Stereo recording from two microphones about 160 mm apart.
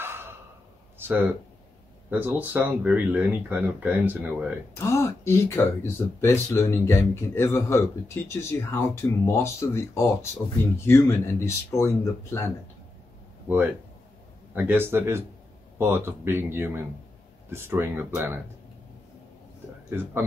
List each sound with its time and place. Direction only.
0.0 s a sound: 15° right (ahead or behind)
2.0 s speech: 10° right (ahead or behind)
4.7 s speech: 15° left (ahead or behind)
14.5 s speech: 10° right (ahead or behind)